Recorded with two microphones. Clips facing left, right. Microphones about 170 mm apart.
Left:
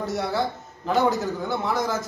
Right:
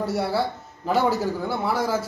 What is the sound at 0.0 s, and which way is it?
A man's voice, 10° right (ahead or behind).